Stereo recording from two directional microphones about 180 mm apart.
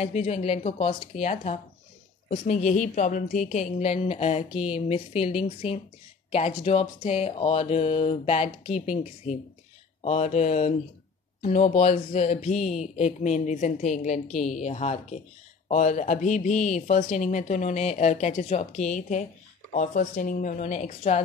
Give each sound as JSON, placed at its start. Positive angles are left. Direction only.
{"t": 0.0, "sound": "speech", "side_deg": 40}